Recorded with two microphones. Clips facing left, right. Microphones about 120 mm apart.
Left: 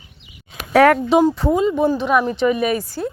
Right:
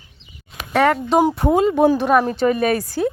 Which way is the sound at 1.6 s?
65° right (ahead or behind).